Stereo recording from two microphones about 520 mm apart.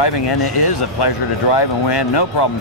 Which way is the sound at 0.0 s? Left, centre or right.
Left.